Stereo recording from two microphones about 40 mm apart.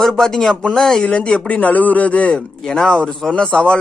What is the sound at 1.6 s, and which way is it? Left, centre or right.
Speech, left.